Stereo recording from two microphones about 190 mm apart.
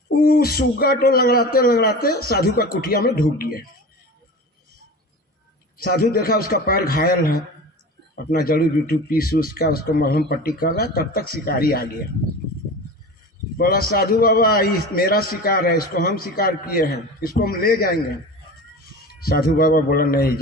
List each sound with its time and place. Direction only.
0.2 s a man's voice: 50° left (ahead or behind)
5.7 s a man's voice: 55° left (ahead or behind)
13.6 s a man's voice: 50° left (ahead or behind)
19.0 s a man's voice: 50° left (ahead or behind)